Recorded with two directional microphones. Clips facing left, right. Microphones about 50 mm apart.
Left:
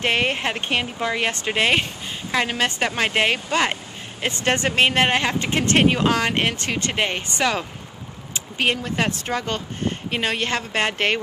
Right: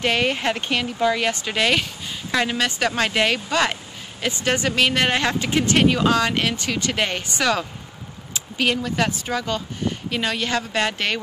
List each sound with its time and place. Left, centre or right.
0.0 s speech: left
4.2 s speech: left; by 5.4 s centre
5.4 s speech: left
6.9 s speech: left
8.5 s speech: left
9.2 s speech: left